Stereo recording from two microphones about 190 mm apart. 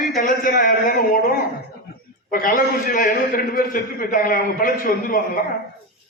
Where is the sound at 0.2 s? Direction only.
50° left (ahead or behind).